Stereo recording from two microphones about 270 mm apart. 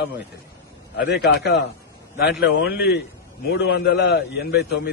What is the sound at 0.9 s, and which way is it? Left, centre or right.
A man's voice, left.